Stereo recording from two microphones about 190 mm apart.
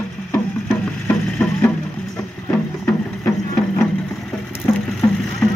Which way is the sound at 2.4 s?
5° left (ahead or behind).